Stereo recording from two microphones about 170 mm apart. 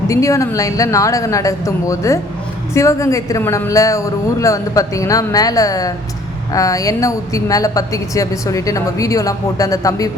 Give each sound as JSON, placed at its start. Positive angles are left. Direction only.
{"t": 0.1, "sound": "a woman's voice", "side_deg": 20}